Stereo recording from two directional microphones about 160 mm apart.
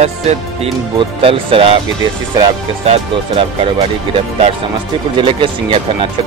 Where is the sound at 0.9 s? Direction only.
35° right (ahead or behind).